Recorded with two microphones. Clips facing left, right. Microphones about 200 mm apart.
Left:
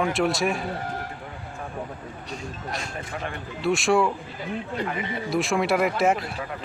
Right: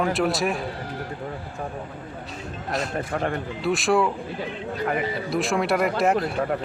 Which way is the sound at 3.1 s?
50° right (ahead or behind).